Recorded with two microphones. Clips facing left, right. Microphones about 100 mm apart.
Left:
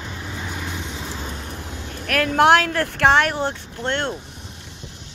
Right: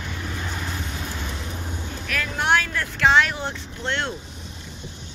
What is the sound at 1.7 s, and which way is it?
Speech, 80° left.